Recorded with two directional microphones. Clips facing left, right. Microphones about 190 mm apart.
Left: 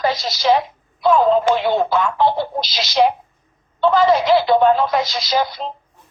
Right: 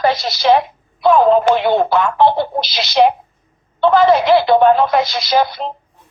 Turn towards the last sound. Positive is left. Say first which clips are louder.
# right 4 dB
turn(degrees=-65)  # may be behind; listen again after turning